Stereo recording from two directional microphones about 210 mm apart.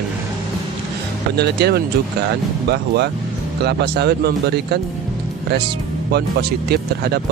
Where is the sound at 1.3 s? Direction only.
50° right (ahead or behind).